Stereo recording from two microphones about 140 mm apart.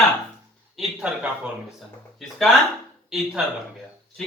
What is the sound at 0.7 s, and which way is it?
Speech, 5° right (ahead or behind).